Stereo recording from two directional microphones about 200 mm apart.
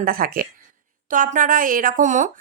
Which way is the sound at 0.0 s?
45° right (ahead or behind).